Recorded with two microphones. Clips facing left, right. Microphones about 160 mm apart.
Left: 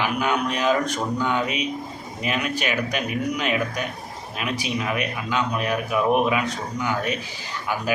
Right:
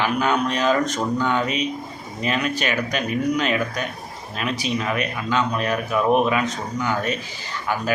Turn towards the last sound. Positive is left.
turn(degrees=10)  # may be behind; listen again after turning